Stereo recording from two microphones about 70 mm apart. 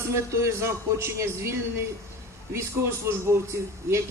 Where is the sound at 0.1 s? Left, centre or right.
Right.